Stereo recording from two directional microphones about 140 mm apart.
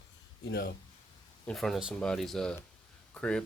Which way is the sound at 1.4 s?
5° left (ahead or behind).